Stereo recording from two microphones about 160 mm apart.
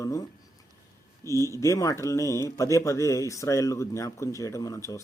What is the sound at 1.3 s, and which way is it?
Speech, 20° left (ahead or behind).